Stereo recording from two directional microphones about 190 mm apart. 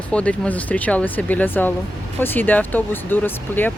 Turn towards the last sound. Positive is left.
turn(degrees=10)  # may be behind; listen again after turning